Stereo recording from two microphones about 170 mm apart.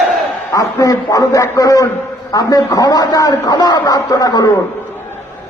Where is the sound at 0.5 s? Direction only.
20° left (ahead or behind).